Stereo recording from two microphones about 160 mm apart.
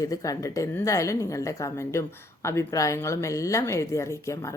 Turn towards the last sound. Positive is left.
turn(degrees=20)  # may be behind; listen again after turning